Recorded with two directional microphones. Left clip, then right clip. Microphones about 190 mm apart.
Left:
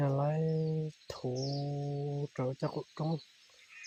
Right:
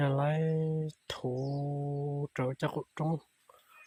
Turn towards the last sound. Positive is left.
turn(degrees=-15)  # may be behind; listen again after turning